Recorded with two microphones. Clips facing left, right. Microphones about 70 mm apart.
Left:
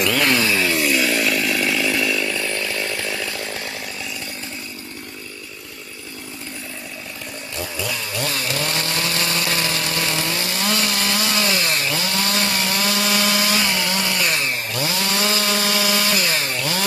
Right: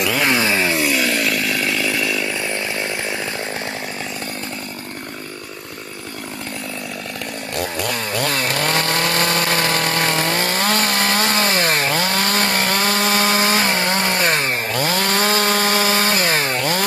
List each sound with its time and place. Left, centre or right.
0.2 s chainsaw: right
0.8 s chainsaw: centre
2.2 s chainsaw: centre
7.5 s chainsaw: right